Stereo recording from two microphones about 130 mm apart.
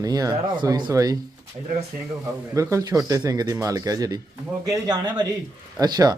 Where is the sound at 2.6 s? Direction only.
25° right (ahead or behind).